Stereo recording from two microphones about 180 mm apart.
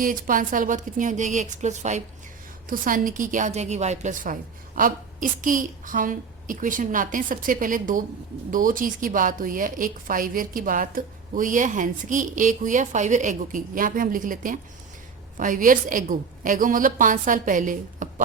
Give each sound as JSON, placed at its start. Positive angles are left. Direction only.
{"t": 0.0, "sound": "a woman's voice", "side_deg": -50}